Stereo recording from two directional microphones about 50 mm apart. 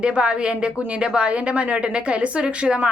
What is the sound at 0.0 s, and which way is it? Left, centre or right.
A woman's voice, centre.